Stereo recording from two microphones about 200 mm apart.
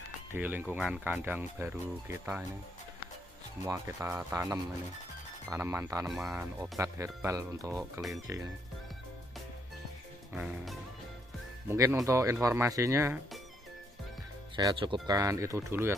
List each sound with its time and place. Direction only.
0.3 s speech: 10° right (ahead or behind)
3.6 s speech: 15° right (ahead or behind)
6.0 s music: centre (ahead or behind)
6.6 s speech: 15° right (ahead or behind)
10.3 s music: centre (ahead or behind)
11.7 s speech: 15° right (ahead or behind)
14.5 s speech: 20° right (ahead or behind)